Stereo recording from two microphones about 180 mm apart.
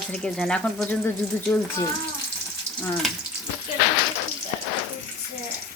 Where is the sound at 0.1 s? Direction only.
5° left (ahead or behind).